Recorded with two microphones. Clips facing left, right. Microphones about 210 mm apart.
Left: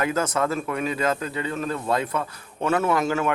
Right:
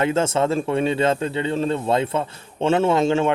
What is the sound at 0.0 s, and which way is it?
Speech, 25° right (ahead or behind).